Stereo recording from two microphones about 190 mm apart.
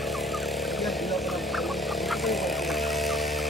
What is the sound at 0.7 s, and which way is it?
Vehicle, centre (ahead or behind).